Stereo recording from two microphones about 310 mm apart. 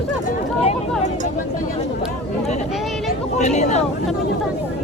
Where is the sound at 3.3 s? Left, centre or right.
Left.